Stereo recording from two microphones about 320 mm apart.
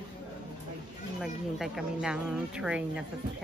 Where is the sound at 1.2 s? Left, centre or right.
Centre.